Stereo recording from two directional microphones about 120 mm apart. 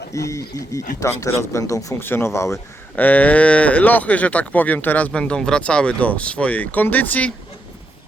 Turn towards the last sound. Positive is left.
turn(degrees=10)  # may be behind; listen again after turning